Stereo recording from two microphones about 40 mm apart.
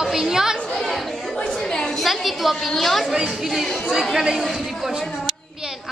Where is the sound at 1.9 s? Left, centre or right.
Centre.